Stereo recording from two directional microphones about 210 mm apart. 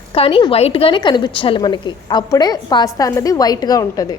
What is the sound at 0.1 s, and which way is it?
Speech, 25° left (ahead or behind).